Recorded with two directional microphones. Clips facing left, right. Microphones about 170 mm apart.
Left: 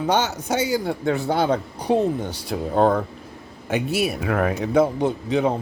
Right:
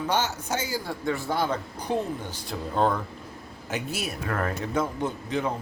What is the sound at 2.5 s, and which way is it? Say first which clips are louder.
Speech: left 6 dB; 55° left (ahead or behind).